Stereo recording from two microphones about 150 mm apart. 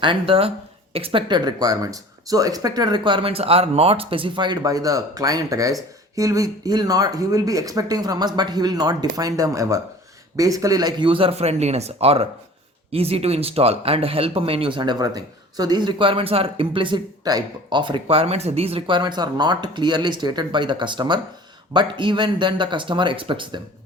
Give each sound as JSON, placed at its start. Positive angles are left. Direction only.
{"t": 0.0, "sound": "speech", "side_deg": -35}